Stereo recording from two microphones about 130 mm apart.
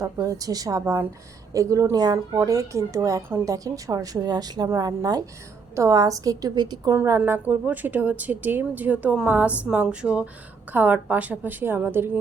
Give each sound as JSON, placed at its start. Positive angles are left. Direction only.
{"t": 0.0, "sound": "a woman's voice", "side_deg": -25}
{"t": 6.9, "sound": "a woman's voice", "side_deg": -20}